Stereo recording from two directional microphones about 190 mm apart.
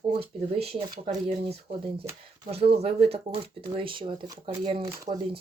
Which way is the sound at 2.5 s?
30° right (ahead or behind).